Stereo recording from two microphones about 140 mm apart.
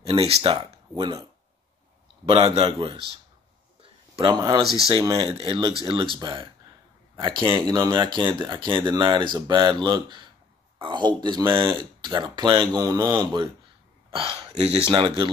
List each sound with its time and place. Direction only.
0.0 s speech: 45° right (ahead or behind)
2.2 s speech: 45° right (ahead or behind)
3.8 s a sound: 40° right (ahead or behind)
4.4 s speech: 30° right (ahead or behind)
5.2 s speech: 40° right (ahead or behind)
14.9 s speech: 35° right (ahead or behind)